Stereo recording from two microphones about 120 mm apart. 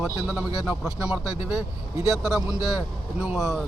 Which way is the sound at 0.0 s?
5° right (ahead or behind).